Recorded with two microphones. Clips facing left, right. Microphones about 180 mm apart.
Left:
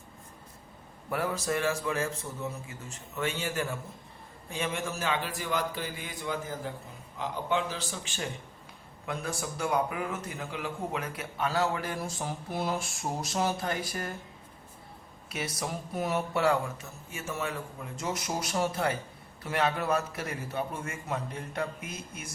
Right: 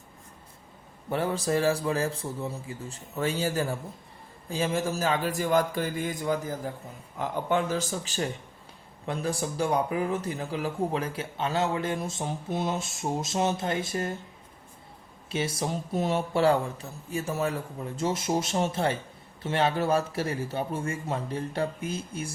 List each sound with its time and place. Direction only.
1.1 s a man's voice: 30° right (ahead or behind)
15.3 s a man's voice: 30° right (ahead or behind)